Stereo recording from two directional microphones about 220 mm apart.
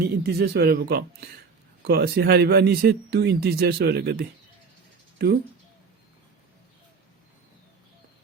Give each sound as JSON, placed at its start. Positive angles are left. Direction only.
{"t": 0.0, "sound": "speech", "side_deg": -45}